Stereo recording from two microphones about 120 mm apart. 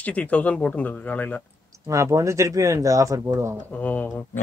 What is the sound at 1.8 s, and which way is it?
Speech, 25° right (ahead or behind).